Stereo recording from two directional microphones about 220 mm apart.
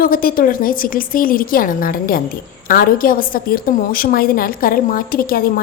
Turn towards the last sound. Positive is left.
turn(degrees=40)  # may be behind; listen again after turning